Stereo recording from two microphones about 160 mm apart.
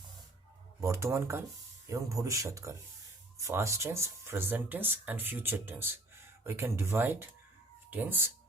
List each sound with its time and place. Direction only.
0.8 s speech: 15° right (ahead or behind)